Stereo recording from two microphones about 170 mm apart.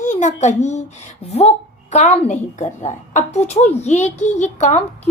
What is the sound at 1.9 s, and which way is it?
A woman's voice, 40° left (ahead or behind).